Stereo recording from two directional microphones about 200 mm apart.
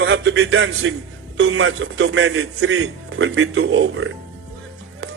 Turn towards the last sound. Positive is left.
turn(degrees=-65)  # may be behind; listen again after turning